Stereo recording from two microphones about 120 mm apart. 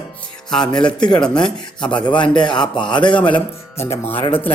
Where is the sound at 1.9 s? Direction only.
40° left (ahead or behind).